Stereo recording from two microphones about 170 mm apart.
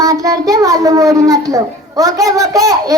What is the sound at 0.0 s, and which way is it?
A child's voice, 20° right (ahead or behind).